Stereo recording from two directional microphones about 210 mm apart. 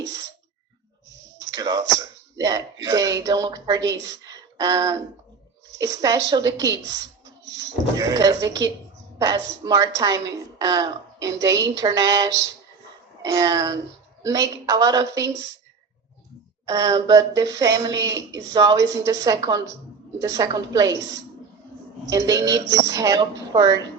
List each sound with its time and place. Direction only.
1.4 s a sound: 15° right (ahead or behind)
2.8 s speech: 15° right (ahead or behind)
4.0 s a sound: 20° right (ahead or behind)
5.8 s a woman's voice: 15° right (ahead or behind)
11.5 s speech: 60° right (ahead or behind)
11.8 s speech: 15° right (ahead or behind)
16.6 s speech: 15° right (ahead or behind)
22.1 s speech: 15° right (ahead or behind)